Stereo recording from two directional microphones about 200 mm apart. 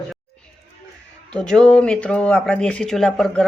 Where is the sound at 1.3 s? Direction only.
5° left (ahead or behind).